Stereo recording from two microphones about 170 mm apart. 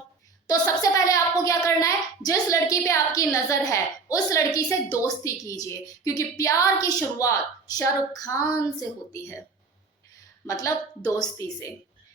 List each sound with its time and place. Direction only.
0.6 s a woman's voice: 20° left (ahead or behind)